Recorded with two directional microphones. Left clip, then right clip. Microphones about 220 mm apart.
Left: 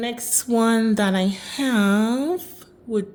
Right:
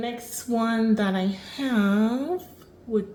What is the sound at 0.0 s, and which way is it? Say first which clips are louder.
Speech: left 5 dB; 50° left (ahead or behind).